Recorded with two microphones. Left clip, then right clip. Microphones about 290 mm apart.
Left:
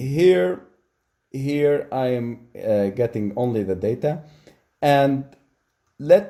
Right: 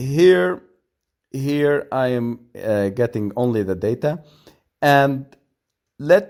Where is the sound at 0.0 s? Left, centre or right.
Right.